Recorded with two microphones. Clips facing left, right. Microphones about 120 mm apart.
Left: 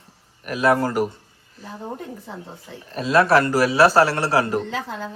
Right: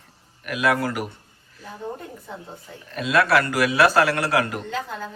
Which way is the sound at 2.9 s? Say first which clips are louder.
Left 3 dB; 35° left (ahead or behind).